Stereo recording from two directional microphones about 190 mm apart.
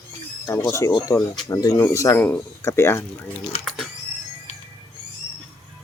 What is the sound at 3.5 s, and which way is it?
Speech, 30° left (ahead or behind).